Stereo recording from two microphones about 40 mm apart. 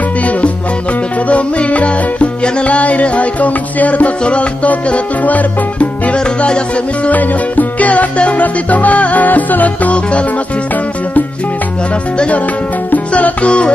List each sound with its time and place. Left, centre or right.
1.3 s music: left
5.2 s music: left
6.1 s music: left
7.1 s music: left
12.9 s music: left